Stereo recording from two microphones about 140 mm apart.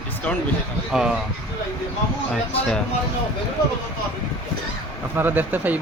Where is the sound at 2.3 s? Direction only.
5° left (ahead or behind).